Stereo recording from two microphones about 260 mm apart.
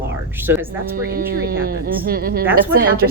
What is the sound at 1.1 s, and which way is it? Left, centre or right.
A woman's voice, right.